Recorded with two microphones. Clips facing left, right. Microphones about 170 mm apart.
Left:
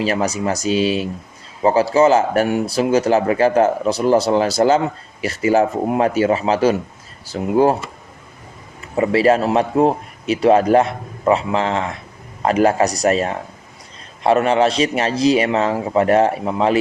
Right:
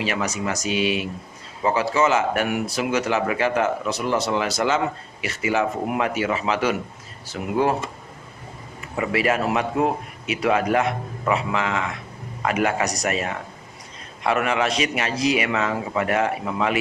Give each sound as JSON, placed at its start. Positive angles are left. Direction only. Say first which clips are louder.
{"t": 0.0, "sound": "speech", "louder": "left 6 dB", "side_deg": 35}
{"t": 9.0, "sound": "speech", "louder": "left 7 dB", "side_deg": 30}